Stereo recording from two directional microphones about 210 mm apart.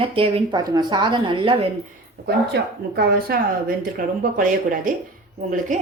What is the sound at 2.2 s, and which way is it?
Speech, 50° right (ahead or behind).